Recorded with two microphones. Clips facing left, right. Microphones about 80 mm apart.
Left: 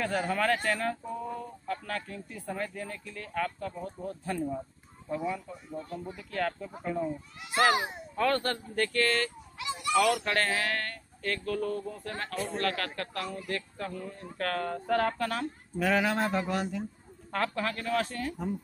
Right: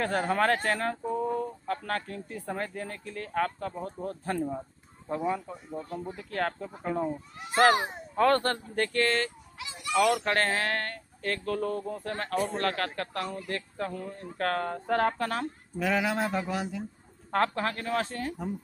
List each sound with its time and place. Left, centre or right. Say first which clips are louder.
0.0 s speech: right 3 dB; right
8.7 s speech: even; right
9.6 s speech: even; centre
10.2 s speech: right 2 dB; right
15.8 s a man's voice: left 1 dB; centre
17.3 s speech: right 4 dB; right